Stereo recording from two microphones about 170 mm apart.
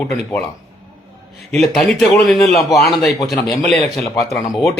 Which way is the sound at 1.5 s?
Centre (ahead or behind).